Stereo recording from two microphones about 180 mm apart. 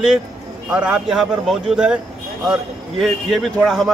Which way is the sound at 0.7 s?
5° right (ahead or behind).